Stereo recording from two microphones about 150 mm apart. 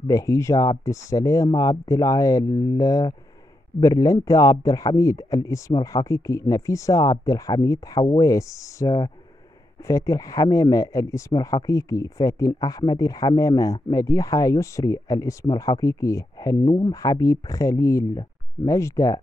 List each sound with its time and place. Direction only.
0.0 s speech: 20° left (ahead or behind)